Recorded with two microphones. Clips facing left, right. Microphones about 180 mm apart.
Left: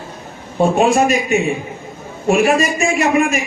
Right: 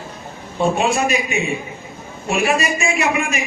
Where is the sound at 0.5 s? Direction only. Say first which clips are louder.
Left 5 dB; 45° left (ahead or behind).